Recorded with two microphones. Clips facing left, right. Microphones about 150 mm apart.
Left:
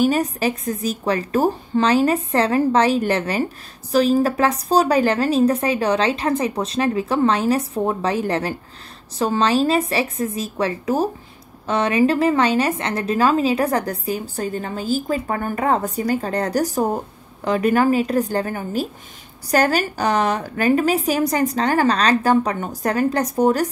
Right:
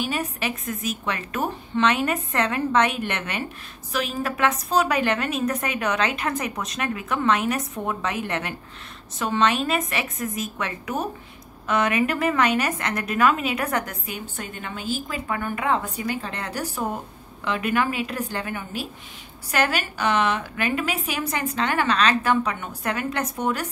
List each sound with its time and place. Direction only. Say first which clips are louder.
0.0 s a woman's voice: left 9 dB; 40° left (ahead or behind)